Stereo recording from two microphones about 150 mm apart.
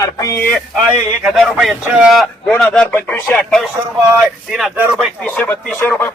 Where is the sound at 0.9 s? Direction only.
5° right (ahead or behind).